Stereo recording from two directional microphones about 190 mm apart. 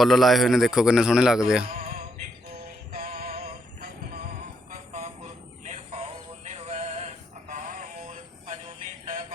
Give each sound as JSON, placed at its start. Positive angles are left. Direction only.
{"t": 0.0, "sound": "a man's voice", "side_deg": 0}
{"t": 2.9, "sound": "synthetic singing", "side_deg": -50}
{"t": 3.4, "sound": "music", "side_deg": -55}
{"t": 4.7, "sound": "a sound", "side_deg": -40}